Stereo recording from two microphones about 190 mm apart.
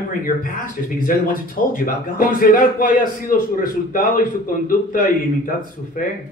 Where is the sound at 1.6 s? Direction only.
45° left (ahead or behind).